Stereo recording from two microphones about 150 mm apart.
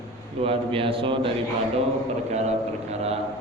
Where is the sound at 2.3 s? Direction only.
45° right (ahead or behind).